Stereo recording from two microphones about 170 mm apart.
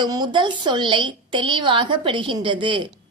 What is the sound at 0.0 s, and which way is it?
A woman's voice, 25° right (ahead or behind).